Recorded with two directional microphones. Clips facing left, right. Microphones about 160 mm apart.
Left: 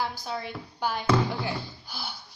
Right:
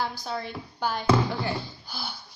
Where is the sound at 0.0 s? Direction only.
10° left (ahead or behind).